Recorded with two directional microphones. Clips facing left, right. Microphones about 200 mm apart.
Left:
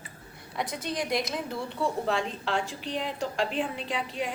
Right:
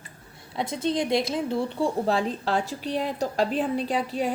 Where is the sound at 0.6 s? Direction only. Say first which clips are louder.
Right 6 dB; 25° right (ahead or behind).